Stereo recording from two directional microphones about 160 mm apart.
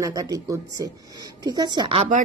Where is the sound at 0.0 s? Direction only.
20° right (ahead or behind).